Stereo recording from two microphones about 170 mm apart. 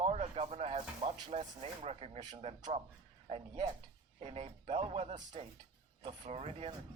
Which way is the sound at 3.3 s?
35° right (ahead or behind).